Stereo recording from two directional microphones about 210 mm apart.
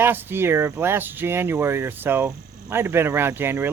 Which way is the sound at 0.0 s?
10° right (ahead or behind).